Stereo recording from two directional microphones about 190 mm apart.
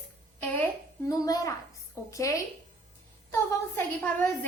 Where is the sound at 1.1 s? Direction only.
20° left (ahead or behind).